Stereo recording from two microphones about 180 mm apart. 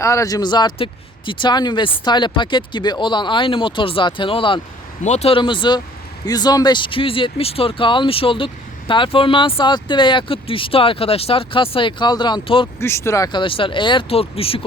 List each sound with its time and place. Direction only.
0.0 s speech: 15° left (ahead or behind)
12.8 s speech: 15° left (ahead or behind); by 14.6 s 30° left (ahead or behind)